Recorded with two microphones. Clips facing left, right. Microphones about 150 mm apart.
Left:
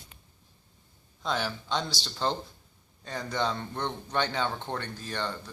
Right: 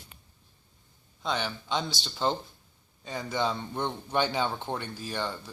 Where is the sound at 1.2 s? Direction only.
Centre (ahead or behind).